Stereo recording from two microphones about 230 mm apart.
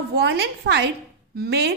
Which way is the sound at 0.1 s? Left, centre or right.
Right.